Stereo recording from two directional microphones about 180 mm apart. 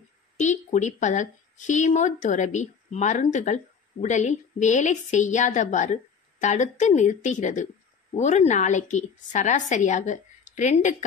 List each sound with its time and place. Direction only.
0.4 s a woman's voice: 40° left (ahead or behind)